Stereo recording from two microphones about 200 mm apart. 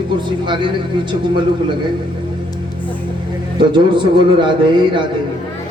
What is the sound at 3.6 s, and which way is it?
Speech, 25° right (ahead or behind).